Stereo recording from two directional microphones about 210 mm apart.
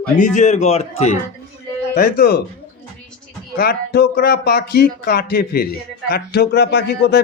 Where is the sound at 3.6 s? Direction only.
50° left (ahead or behind).